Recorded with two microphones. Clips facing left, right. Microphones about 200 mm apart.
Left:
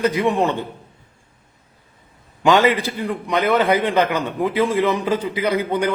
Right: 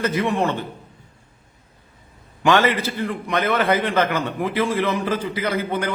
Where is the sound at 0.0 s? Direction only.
15° left (ahead or behind).